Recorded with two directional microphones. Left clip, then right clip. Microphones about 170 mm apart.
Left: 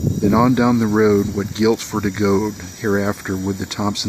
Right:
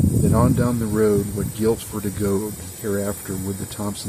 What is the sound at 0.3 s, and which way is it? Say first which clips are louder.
Speech: left 7 dB; 35° left (ahead or behind).